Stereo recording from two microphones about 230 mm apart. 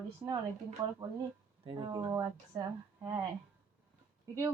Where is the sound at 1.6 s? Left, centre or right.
Centre.